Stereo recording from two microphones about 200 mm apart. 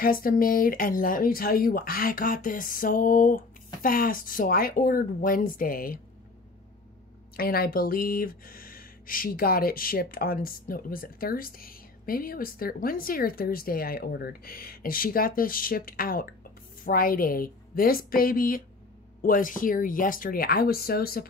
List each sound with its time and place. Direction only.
0.0 s speech: 45° left (ahead or behind)
7.3 s speech: 50° left (ahead or behind)